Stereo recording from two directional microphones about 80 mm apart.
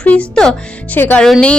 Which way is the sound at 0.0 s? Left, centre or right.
Centre.